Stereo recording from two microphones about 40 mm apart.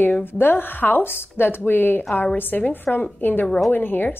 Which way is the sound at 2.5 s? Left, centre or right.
Left.